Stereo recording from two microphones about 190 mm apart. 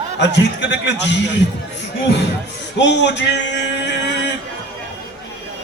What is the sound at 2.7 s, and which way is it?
Speech, 65° left (ahead or behind).